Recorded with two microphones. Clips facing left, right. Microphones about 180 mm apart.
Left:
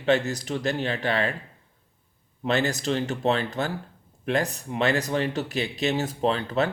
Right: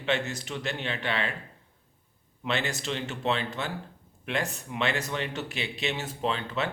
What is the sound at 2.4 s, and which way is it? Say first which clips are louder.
A man's voice: left 6 dB; 40° left (ahead or behind).